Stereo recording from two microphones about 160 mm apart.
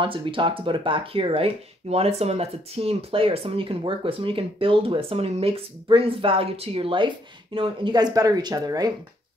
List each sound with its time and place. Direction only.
0.0 s speech: 30° right (ahead or behind)